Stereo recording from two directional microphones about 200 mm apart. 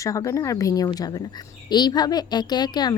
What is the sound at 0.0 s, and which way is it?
A woman's voice, 15° left (ahead or behind).